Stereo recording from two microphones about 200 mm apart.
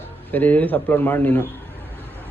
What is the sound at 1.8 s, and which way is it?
Vehicle, 10° right (ahead or behind).